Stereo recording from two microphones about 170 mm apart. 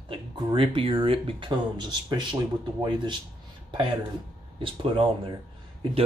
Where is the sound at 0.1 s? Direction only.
30° right (ahead or behind).